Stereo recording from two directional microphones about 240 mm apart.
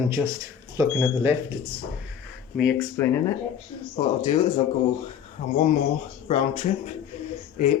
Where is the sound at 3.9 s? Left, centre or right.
Left.